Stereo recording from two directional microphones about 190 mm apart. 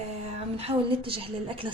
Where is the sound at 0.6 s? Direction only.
30° right (ahead or behind).